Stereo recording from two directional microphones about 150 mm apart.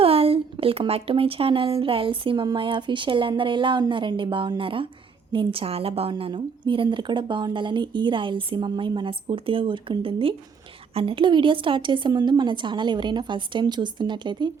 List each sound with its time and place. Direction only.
0.0 s a woman's voice: 40° right (ahead or behind)